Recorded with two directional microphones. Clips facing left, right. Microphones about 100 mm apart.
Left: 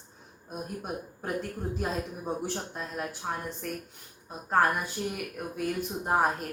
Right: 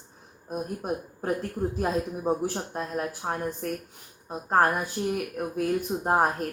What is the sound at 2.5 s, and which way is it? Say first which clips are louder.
Speech: right 5 dB; 45° right (ahead or behind).